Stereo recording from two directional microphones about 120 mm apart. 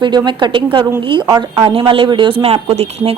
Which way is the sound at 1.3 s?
30° right (ahead or behind).